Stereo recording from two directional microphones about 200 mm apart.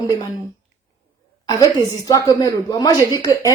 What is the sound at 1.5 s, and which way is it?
A woman's voice, 20° left (ahead or behind).